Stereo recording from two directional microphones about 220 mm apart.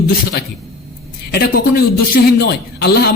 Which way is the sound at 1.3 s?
45° left (ahead or behind).